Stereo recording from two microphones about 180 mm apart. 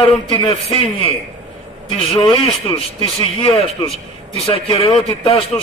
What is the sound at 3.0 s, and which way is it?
A man's voice, 30° left (ahead or behind).